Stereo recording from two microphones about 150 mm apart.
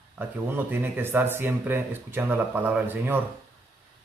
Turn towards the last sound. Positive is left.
turn(degrees=-15)  # may be behind; listen again after turning